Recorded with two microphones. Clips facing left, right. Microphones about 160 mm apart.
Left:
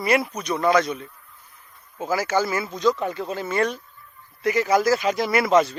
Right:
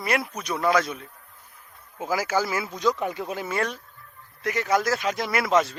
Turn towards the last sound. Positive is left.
turn(degrees=0)  # may be behind; listen again after turning